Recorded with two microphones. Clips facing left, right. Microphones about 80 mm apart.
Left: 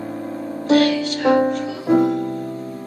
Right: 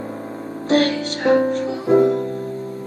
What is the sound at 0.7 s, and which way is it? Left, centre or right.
Music, right.